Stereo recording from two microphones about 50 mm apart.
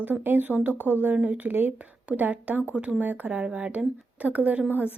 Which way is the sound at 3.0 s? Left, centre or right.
Right.